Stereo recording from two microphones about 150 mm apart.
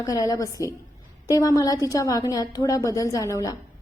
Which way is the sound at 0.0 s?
25° left (ahead or behind).